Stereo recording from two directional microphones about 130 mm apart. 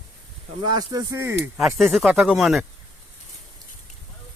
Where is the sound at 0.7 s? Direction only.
30° right (ahead or behind).